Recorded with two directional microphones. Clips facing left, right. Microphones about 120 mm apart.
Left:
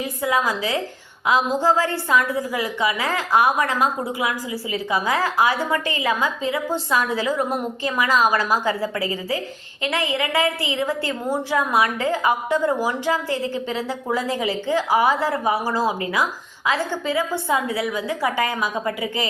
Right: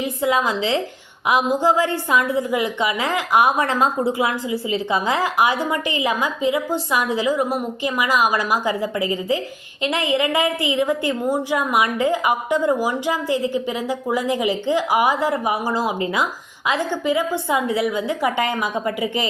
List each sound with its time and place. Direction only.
0.0 s a woman's voice: 25° right (ahead or behind)
3.6 s a woman's voice: 30° right (ahead or behind)